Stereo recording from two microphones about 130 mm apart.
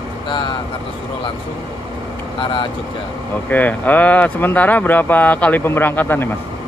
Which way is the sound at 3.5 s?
15° left (ahead or behind).